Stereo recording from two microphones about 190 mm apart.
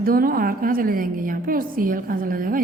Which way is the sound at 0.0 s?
50° right (ahead or behind).